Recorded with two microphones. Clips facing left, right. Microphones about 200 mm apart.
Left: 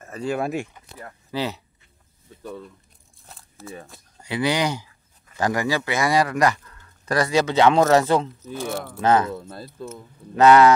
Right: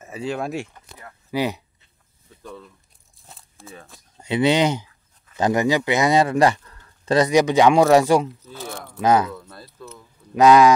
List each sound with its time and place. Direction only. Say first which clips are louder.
0.0 s a sound: even; 5° right (ahead or behind)
0.3 s speech: left 2 dB; 5° left (ahead or behind)
1.3 s speech: right 4 dB; 15° right (ahead or behind)
3.7 s speech: left 3 dB; 15° left (ahead or behind)
4.2 s speech: right 5 dB; 25° right (ahead or behind)
8.5 s speech: left 6 dB; 10° left (ahead or behind)
9.0 s speech: right 1 dB; 10° right (ahead or behind)
9.3 s speech: left 4 dB; 25° left (ahead or behind)
10.3 s speech: right 1 dB; 10° right (ahead or behind)